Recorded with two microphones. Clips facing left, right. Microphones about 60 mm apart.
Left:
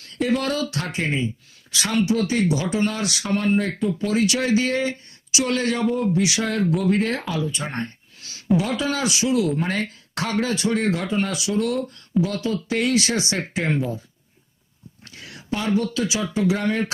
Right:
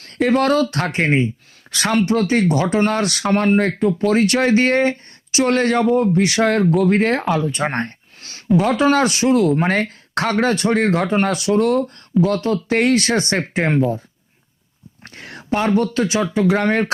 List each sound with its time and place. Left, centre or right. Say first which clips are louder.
0.0 s speech: right 6 dB; right
15.0 s speech: right 6 dB; right